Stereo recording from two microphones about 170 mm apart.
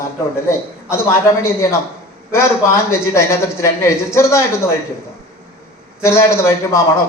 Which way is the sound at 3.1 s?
15° left (ahead or behind).